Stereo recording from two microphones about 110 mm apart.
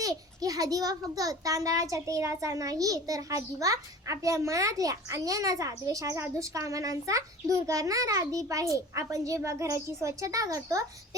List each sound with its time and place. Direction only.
0.0 s a child's voice: 30° right (ahead or behind)